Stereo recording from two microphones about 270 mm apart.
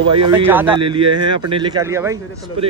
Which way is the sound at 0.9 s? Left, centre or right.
Centre.